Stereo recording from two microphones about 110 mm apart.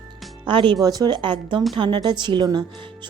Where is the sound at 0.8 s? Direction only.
35° right (ahead or behind).